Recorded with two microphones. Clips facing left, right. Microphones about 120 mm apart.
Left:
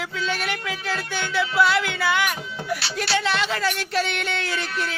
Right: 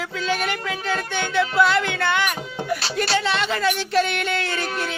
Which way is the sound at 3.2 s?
Centre (ahead or behind).